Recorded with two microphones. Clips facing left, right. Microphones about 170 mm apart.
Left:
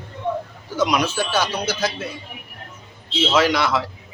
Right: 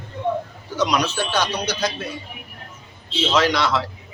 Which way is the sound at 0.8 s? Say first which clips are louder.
Left 1 dB; 10° left (ahead or behind).